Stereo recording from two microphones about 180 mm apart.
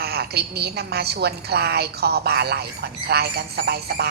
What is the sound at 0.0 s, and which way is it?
A woman's voice, 65° right (ahead or behind).